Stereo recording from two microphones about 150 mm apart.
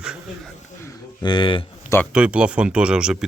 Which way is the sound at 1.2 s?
35° left (ahead or behind).